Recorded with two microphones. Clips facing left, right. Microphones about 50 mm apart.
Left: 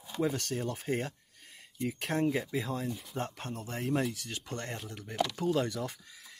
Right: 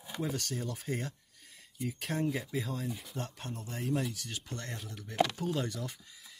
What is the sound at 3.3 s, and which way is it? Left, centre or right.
Speech, left.